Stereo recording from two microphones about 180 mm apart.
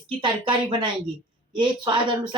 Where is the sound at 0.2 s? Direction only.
25° right (ahead or behind).